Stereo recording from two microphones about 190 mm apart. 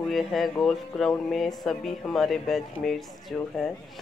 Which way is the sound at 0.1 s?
Centre (ahead or behind).